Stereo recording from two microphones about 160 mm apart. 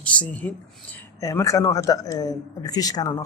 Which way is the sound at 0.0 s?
10° left (ahead or behind).